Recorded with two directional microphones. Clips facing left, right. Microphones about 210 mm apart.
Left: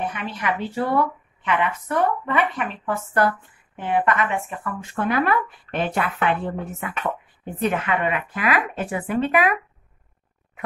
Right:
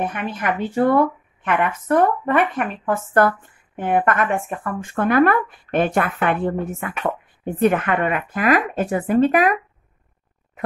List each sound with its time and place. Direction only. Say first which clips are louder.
0.0 s a woman's voice: right 3 dB; 50° right (ahead or behind)